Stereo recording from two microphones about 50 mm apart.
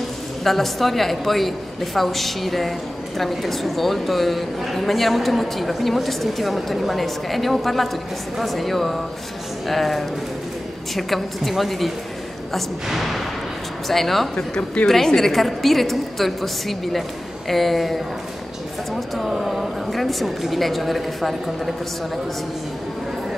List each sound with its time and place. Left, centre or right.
0.4 s a woman's voice: centre
14.3 s speech: centre
14.9 s a woman's voice: centre